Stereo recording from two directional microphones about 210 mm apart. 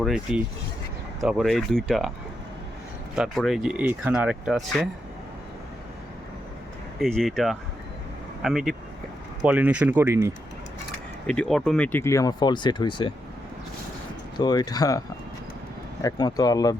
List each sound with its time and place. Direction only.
0.0 s speech: centre (ahead or behind)
3.2 s speech: centre (ahead or behind)
7.0 s speech: centre (ahead or behind)
11.3 s speech: 5° left (ahead or behind); by 13.1 s 20° left (ahead or behind)
14.3 s speech: 20° left (ahead or behind)